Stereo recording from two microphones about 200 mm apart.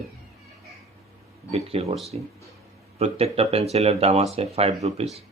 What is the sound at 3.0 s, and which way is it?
Speech, 30° right (ahead or behind).